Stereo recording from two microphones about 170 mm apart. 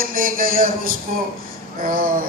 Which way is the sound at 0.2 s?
55° right (ahead or behind).